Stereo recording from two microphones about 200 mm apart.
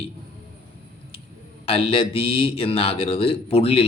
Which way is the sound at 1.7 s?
25° left (ahead or behind).